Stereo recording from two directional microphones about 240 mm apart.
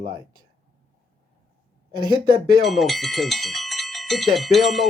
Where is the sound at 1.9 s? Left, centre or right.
Centre.